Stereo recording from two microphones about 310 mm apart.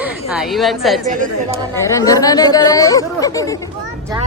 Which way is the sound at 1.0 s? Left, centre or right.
Right.